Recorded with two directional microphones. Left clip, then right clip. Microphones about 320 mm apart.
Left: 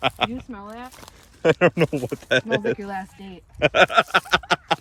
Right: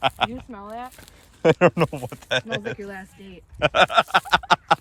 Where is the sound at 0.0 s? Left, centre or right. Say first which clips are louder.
Even; centre.